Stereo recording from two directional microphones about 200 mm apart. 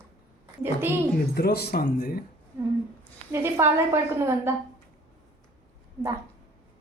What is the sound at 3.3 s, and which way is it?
A woman's voice, 15° right (ahead or behind).